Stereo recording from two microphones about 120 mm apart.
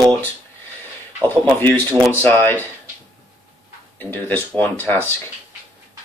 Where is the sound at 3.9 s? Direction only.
15° left (ahead or behind).